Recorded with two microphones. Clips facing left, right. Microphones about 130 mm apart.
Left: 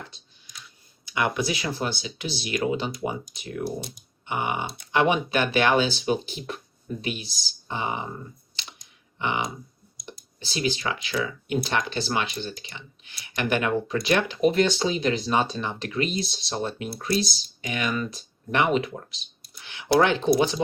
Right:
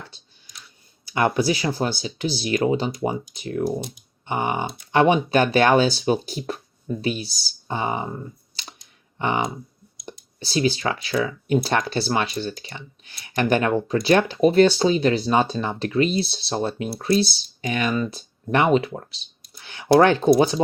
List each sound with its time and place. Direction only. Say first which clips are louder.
1.0 s speech: right 5 dB; 35° right (ahead or behind)
9.1 s speech: right 4 dB; 40° right (ahead or behind)